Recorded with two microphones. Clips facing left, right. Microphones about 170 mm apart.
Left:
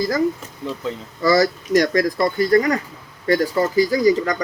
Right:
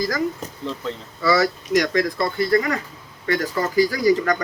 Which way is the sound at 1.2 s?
40° left (ahead or behind).